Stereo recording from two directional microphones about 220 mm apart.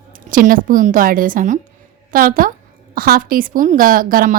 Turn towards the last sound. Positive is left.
turn(degrees=-40)  # may be behind; listen again after turning